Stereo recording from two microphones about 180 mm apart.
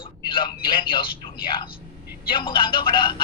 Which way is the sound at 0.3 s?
30° left (ahead or behind).